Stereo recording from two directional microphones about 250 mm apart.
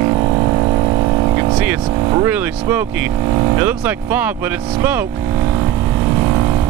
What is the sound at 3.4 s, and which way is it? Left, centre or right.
Speech, centre.